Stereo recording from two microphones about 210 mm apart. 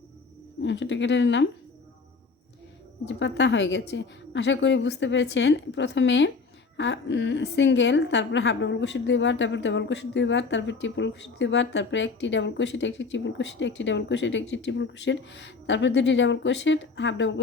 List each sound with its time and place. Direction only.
0.6 s a woman's voice: 60° left (ahead or behind)
3.1 s a woman's voice: 60° left (ahead or behind)